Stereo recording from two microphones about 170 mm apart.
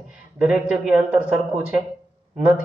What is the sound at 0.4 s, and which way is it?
A man's voice, 5° right (ahead or behind).